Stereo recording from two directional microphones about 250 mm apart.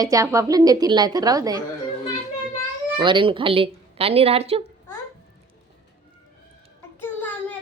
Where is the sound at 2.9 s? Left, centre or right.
Centre.